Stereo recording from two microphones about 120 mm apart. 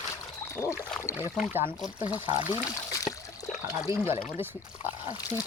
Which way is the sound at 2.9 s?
30° left (ahead or behind).